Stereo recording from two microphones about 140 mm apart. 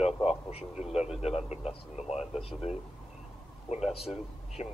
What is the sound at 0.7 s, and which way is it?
Speech, 5° right (ahead or behind).